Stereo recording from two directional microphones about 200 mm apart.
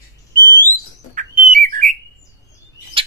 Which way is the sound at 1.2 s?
40° right (ahead or behind).